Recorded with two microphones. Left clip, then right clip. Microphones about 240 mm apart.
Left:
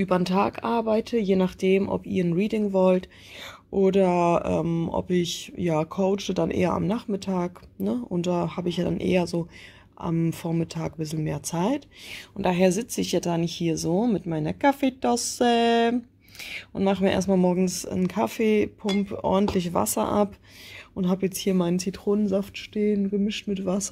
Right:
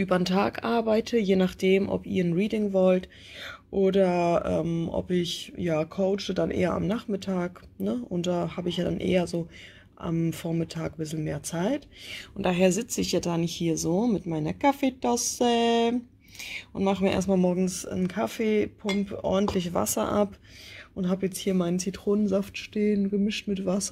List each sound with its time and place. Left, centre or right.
0.0 s speech: centre